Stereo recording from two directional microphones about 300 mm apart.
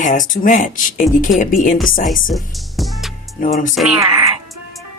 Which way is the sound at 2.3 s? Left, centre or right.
Centre.